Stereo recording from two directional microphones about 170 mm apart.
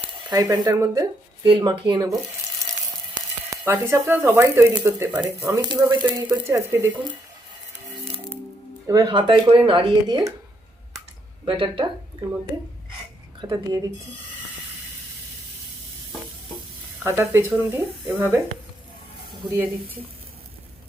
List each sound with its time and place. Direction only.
0.3 s speech: 20° right (ahead or behind)
1.5 s speech: 30° right (ahead or behind)
3.7 s speech: 15° right (ahead or behind)
8.9 s speech: 25° right (ahead or behind)
11.4 s speech: 30° right (ahead or behind)
13.4 s speech: 25° right (ahead or behind)
17.0 s speech: 15° right (ahead or behind)